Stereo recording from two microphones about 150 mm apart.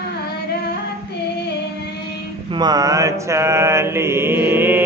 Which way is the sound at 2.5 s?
25° right (ahead or behind).